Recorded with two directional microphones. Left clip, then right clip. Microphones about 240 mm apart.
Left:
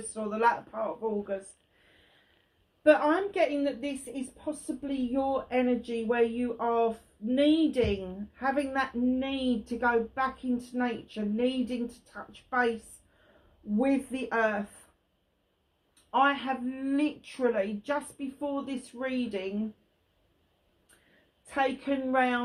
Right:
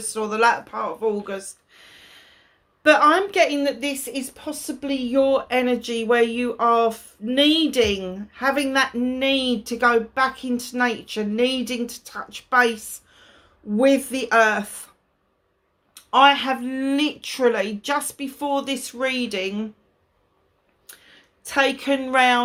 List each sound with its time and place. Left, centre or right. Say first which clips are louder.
0.1 s speech: right 8 dB; right
2.8 s speech: right 8 dB; right
13.7 s speech: right 11 dB; right
16.0 s speech: right 11 dB; right
21.4 s speech: right 9 dB; right